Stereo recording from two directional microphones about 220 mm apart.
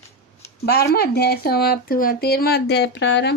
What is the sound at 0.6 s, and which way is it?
Speech, 45° left (ahead or behind).